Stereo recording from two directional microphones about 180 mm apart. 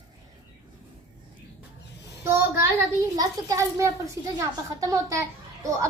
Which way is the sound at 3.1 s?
20° right (ahead or behind).